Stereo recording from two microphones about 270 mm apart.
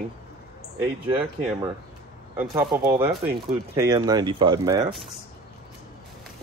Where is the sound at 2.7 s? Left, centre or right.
Centre.